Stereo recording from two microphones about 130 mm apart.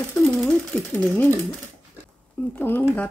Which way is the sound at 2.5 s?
15° left (ahead or behind).